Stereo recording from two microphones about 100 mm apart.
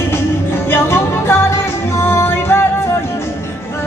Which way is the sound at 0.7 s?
25° left (ahead or behind).